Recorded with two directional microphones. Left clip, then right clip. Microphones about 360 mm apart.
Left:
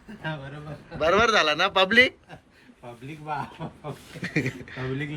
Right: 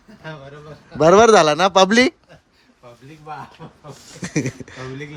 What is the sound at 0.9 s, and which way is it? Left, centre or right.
Speech, centre.